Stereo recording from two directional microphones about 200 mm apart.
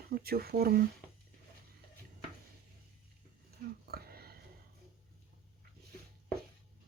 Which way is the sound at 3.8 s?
50° right (ahead or behind).